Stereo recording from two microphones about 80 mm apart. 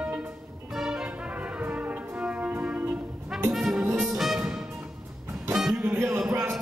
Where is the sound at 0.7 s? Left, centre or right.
Centre; by 3.0 s right.